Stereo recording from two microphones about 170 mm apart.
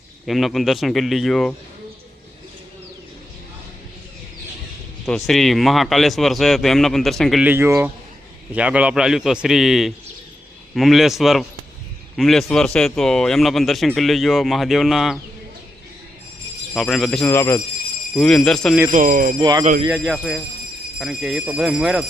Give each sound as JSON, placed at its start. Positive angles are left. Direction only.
{"t": 0.3, "sound": "speech", "side_deg": 0}
{"t": 5.0, "sound": "speech", "side_deg": 0}
{"t": 7.4, "sound": "speech", "side_deg": -15}
{"t": 16.7, "sound": "speech", "side_deg": 0}
{"t": 17.2, "sound": "speech", "side_deg": 15}
{"t": 18.9, "sound": "speech", "side_deg": -50}
{"t": 19.4, "sound": "speech", "side_deg": -25}
{"t": 19.9, "sound": "speech", "side_deg": 0}